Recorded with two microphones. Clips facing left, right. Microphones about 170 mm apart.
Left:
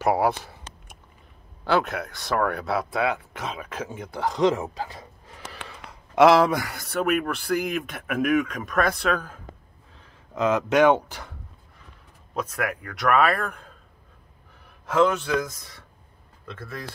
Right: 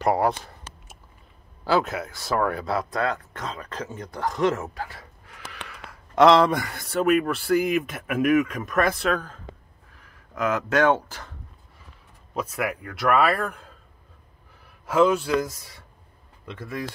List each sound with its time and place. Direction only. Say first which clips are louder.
0.0 s a sound: even; 5° left (ahead or behind)
1.6 s speech: even; centre (ahead or behind); by 5.4 s 20° left (ahead or behind)
6.1 s speech: even; 5° left (ahead or behind)
9.9 s speech: left 3 dB; 25° left (ahead or behind)
12.4 s speech: right 1 dB; 5° right (ahead or behind)
14.9 s a man's voice: right 1 dB; 10° right (ahead or behind)